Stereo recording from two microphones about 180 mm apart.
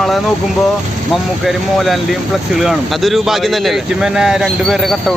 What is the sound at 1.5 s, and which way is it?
Speech, centre (ahead or behind).